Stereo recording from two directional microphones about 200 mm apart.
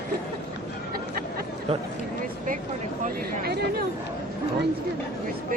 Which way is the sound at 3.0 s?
50° right (ahead or behind).